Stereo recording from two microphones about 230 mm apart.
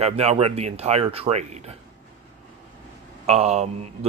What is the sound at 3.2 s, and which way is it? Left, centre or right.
Speech, right.